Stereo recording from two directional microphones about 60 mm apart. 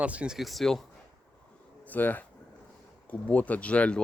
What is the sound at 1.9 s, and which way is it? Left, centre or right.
Speech, left.